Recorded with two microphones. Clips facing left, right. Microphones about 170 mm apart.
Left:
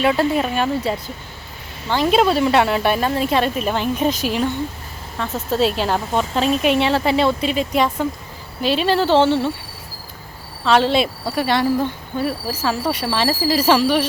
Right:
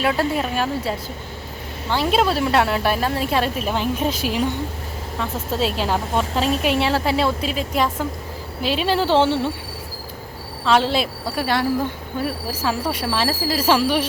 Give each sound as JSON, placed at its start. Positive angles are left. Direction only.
{"t": 0.0, "sound": "speech", "side_deg": 0}
{"t": 10.7, "sound": "speech", "side_deg": -5}